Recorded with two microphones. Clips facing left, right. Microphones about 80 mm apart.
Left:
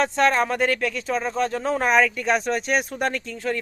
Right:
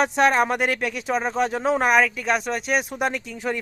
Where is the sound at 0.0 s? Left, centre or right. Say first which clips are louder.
Right 1 dB; centre.